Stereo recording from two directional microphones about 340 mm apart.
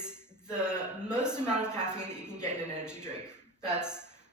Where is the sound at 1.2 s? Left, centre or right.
Centre.